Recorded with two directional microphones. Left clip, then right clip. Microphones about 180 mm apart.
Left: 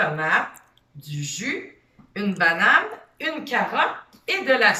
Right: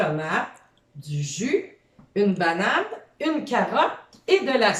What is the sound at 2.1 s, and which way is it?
Speech, 20° right (ahead or behind).